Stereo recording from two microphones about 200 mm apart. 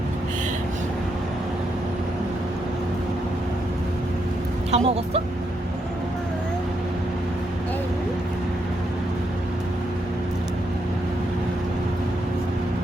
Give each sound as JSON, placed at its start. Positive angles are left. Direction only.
{"t": 4.7, "sound": "speech", "side_deg": -30}